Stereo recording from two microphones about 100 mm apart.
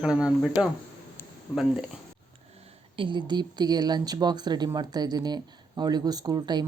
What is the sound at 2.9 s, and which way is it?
Speech, 55° right (ahead or behind).